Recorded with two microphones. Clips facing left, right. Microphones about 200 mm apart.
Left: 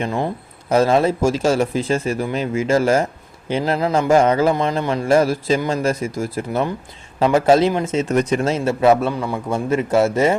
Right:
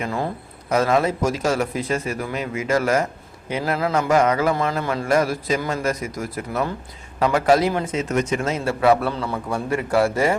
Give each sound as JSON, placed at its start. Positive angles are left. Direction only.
{"t": 0.0, "sound": "a man's voice", "side_deg": 20}